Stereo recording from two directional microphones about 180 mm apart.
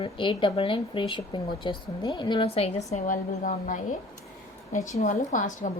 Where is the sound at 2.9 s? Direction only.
45° left (ahead or behind).